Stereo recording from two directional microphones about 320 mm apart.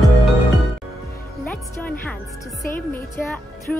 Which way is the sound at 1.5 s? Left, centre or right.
Centre.